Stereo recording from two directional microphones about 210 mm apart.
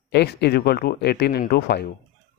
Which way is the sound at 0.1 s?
55° left (ahead or behind).